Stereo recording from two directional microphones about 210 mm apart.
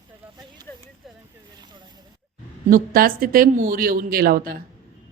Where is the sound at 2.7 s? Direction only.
40° right (ahead or behind).